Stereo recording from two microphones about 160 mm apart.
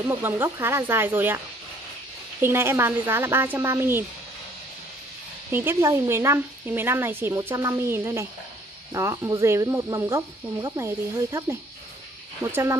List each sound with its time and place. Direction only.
0.0 s speech: 15° right (ahead or behind)
2.4 s speech: 15° right (ahead or behind)
5.5 s speech: 15° right (ahead or behind)